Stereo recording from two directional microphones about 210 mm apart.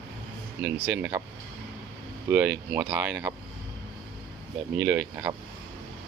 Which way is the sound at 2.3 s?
10° right (ahead or behind).